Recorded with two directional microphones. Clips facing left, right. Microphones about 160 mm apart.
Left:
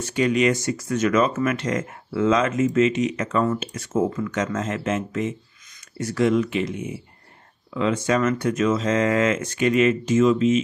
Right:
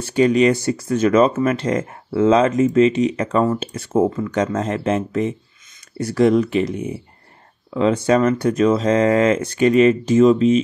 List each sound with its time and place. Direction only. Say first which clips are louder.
0.0 s speech: right 5 dB; 35° right (ahead or behind)